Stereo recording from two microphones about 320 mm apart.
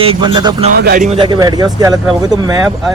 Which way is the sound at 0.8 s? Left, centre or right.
Right.